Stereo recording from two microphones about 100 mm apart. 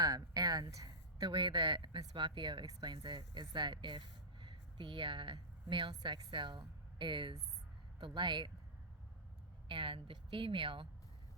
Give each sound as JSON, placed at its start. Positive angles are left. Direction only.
{"t": 0.0, "sound": "a sound", "side_deg": -40}
{"t": 1.3, "sound": "speech", "side_deg": -55}
{"t": 9.6, "sound": "a woman's voice", "side_deg": -55}